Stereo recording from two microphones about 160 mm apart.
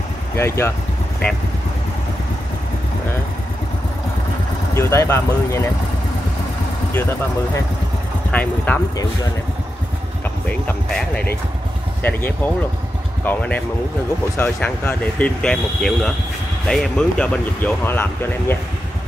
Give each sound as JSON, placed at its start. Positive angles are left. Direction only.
{"t": 0.4, "sound": "speech", "side_deg": 15}
{"t": 4.7, "sound": "speech", "side_deg": 15}
{"t": 6.9, "sound": "speech", "side_deg": 15}
{"t": 10.9, "sound": "speech", "side_deg": 5}